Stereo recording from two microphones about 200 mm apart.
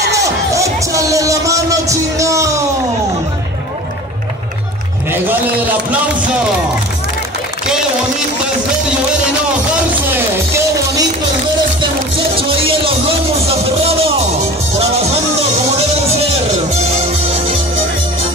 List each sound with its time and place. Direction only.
0.1 s music: 15° right (ahead or behind)
10.1 s music: 15° right (ahead or behind)
12.4 s music: 30° right (ahead or behind)
16.7 s music: 30° right (ahead or behind)